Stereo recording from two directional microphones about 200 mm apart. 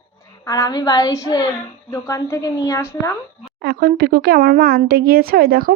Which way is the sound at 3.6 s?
50° right (ahead or behind).